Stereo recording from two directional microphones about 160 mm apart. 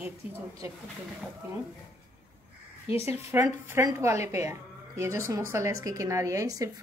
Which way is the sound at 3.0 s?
15° right (ahead or behind).